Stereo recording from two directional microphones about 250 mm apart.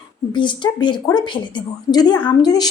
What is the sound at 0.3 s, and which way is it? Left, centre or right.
A woman's voice, centre.